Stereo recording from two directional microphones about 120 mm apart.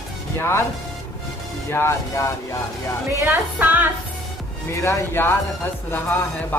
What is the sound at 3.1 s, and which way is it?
Speech, 25° right (ahead or behind).